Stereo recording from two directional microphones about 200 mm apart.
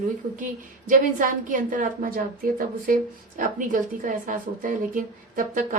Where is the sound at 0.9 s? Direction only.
40° right (ahead or behind).